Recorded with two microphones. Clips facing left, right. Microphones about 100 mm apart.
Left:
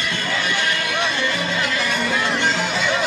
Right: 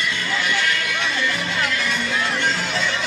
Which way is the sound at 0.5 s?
20° left (ahead or behind).